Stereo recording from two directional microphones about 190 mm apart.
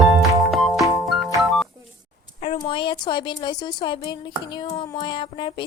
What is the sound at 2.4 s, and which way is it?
A woman's voice, 30° left (ahead or behind).